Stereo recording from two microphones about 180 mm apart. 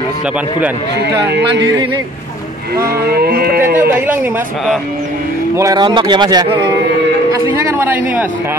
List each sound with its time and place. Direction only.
0.9 s speech: 70° right (ahead or behind)
3.0 s cattle: 60° right (ahead or behind)
3.6 s speech: 10° right (ahead or behind)
5.6 s speech: 20° right (ahead or behind)
7.4 s a sound: 15° right (ahead or behind)